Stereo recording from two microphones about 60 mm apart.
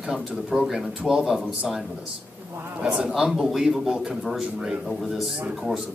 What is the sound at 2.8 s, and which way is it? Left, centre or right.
Speech, centre.